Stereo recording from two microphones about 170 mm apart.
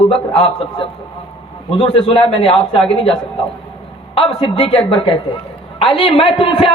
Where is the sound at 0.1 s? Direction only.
35° left (ahead or behind).